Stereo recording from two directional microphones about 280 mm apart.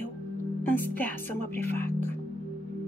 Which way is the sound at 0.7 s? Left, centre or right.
Centre.